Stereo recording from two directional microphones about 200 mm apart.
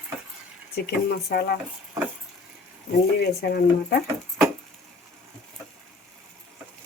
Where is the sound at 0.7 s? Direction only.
50° left (ahead or behind).